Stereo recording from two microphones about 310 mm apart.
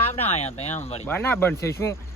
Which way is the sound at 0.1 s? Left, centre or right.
Left.